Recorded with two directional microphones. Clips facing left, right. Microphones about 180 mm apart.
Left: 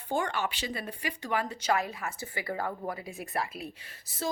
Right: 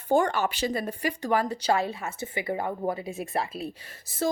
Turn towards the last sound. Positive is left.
turn(degrees=-45)  # may be behind; listen again after turning